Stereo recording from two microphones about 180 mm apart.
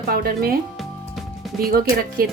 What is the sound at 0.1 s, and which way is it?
Speech, 55° right (ahead or behind).